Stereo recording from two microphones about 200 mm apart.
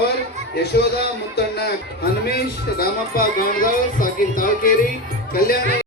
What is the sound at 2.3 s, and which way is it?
Speech, 50° left (ahead or behind).